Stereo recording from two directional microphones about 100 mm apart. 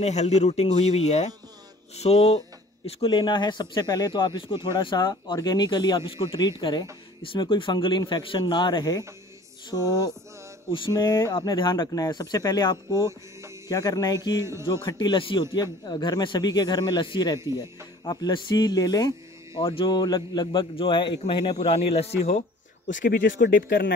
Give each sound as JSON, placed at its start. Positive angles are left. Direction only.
{"t": 0.0, "sound": "a man's voice", "side_deg": 90}
{"t": 3.0, "sound": "speech", "side_deg": 55}
{"t": 11.5, "sound": "speech", "side_deg": 50}
{"t": 14.4, "sound": "speech", "side_deg": -30}
{"t": 14.7, "sound": "speech", "side_deg": 45}
{"t": 19.5, "sound": "speech", "side_deg": 60}
{"t": 20.7, "sound": "speech", "side_deg": 60}